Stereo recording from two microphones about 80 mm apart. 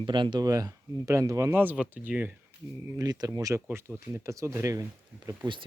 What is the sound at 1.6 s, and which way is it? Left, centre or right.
Speech, right.